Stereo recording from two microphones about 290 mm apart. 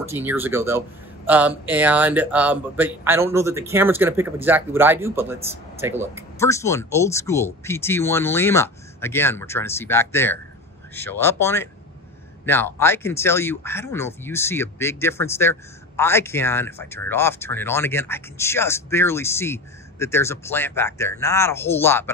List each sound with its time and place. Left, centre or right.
0.0 s speech: centre
6.3 s speech: centre